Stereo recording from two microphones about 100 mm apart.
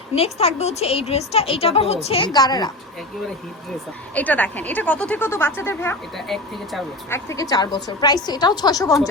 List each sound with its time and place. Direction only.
0.1 s a woman's voice: 90° left
2.2 s a woman's voice: 40° left (ahead or behind)
4.1 s speech: 15° left (ahead or behind)
6.1 s speech: centre (ahead or behind)
7.1 s a woman's voice: 30° left (ahead or behind)